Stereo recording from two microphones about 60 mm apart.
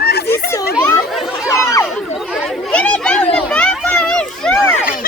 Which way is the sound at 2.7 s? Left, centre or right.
Left.